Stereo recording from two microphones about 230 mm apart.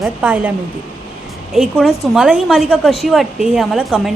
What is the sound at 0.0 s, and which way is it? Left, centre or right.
Speech, centre.